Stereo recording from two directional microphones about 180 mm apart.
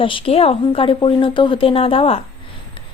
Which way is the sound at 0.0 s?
30° left (ahead or behind).